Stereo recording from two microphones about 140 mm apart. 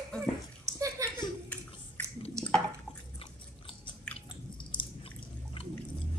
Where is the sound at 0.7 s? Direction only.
25° right (ahead or behind).